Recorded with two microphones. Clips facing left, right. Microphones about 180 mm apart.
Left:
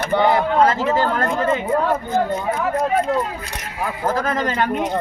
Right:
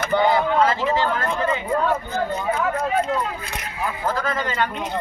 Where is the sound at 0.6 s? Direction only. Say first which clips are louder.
Left 3 dB; 45° left (ahead or behind).